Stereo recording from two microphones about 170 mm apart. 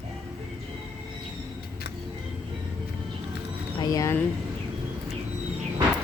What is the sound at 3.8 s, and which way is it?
Speech, 20° left (ahead or behind).